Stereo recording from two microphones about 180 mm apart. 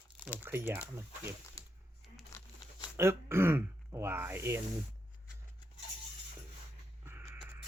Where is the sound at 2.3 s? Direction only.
15° left (ahead or behind).